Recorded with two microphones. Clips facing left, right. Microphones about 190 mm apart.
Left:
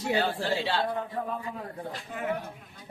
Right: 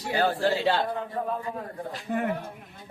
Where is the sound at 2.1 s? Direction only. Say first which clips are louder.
Right 14 dB; 55° right (ahead or behind).